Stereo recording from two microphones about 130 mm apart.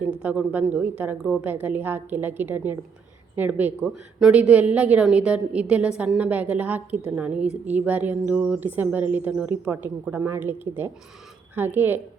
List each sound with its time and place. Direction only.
0.2 s a woman's voice: 15° right (ahead or behind)